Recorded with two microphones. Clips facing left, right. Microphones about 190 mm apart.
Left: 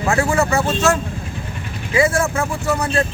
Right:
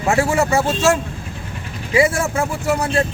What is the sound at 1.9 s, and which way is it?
Speech, 25° right (ahead or behind).